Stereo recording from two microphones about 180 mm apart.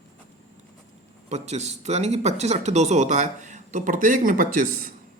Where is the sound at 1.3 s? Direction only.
40° right (ahead or behind).